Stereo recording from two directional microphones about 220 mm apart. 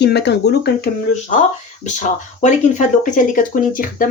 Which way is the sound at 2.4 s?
35° left (ahead or behind).